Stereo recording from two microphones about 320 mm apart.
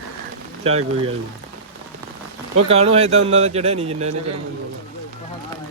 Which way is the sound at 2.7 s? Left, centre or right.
Centre.